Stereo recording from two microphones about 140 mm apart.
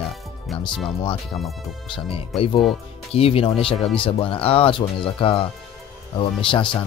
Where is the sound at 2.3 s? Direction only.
Centre (ahead or behind).